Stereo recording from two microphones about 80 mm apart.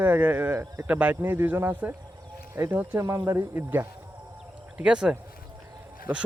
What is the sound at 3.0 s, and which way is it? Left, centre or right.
Speech, right.